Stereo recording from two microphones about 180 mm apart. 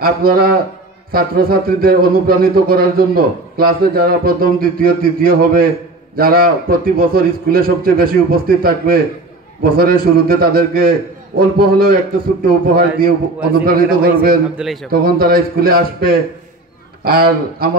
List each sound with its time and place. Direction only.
0.0 s a man's voice: 55° right (ahead or behind)
14.6 s a man's voice: centre (ahead or behind)
14.9 s a man's voice: 55° right (ahead or behind)